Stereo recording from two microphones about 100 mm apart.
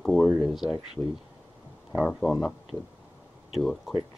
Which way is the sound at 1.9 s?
5° left (ahead or behind).